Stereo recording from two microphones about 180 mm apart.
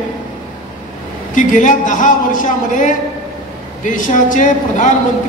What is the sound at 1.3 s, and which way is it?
A man's voice, 45° left (ahead or behind).